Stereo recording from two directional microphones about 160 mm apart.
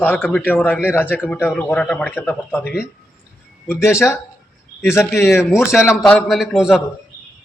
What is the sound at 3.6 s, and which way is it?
Speech, 15° left (ahead or behind).